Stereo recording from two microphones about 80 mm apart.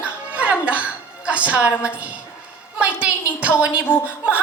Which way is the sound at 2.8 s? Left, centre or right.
Centre.